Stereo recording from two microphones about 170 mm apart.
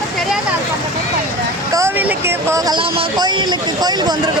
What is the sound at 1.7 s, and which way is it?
Speech, 15° right (ahead or behind).